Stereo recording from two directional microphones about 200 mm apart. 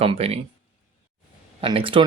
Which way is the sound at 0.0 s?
30° right (ahead or behind).